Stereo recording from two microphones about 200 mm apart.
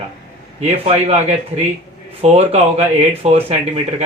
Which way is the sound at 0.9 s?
30° right (ahead or behind).